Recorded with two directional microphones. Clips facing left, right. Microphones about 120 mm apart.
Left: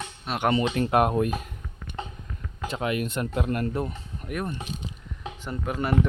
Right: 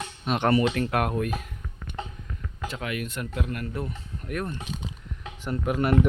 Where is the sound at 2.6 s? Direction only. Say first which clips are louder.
Left 4 dB; 25° left (ahead or behind).